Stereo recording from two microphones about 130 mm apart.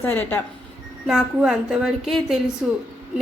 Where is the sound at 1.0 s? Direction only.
5° right (ahead or behind).